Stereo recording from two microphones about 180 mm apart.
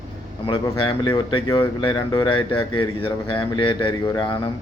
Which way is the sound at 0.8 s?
25° left (ahead or behind).